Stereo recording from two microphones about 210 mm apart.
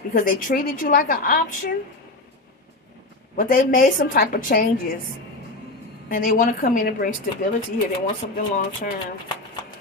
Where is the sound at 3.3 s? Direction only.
40° left (ahead or behind).